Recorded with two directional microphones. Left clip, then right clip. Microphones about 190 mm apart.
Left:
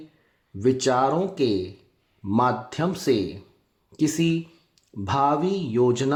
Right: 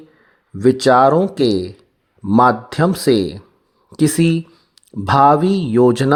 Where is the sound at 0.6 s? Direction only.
40° right (ahead or behind).